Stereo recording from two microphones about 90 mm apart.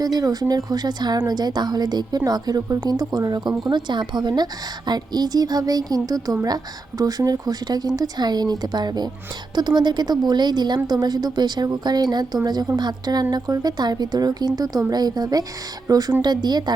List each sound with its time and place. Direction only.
0.0 s a woman's voice: 45° right (ahead or behind)